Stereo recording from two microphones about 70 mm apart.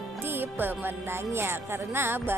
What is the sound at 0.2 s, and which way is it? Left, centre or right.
Speech, right.